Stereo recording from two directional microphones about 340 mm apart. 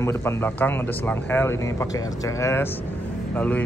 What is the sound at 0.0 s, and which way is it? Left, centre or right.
Speech, centre.